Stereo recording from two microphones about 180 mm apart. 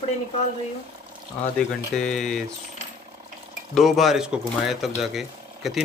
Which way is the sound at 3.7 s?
Centre (ahead or behind).